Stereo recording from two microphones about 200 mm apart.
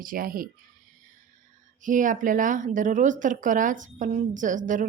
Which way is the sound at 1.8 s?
40° right (ahead or behind).